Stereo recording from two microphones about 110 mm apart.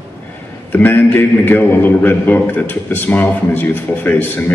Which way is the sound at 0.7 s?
20° left (ahead or behind).